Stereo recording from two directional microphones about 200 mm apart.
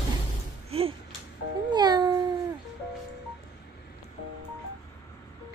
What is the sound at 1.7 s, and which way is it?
Babbling, 20° right (ahead or behind).